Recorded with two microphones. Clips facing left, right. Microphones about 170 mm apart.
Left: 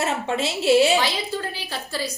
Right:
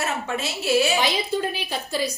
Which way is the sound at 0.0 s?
25° left (ahead or behind).